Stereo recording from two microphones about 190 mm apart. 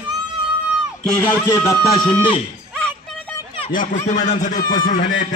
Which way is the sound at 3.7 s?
45° left (ahead or behind).